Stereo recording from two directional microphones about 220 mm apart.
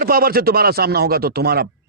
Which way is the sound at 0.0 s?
45° right (ahead or behind).